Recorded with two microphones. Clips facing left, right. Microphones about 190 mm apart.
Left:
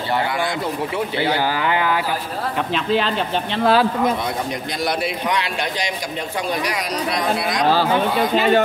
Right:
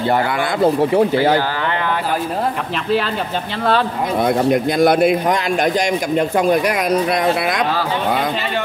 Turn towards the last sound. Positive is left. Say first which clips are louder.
# right 4 dB
turn(degrees=-55)  # may be behind; listen again after turning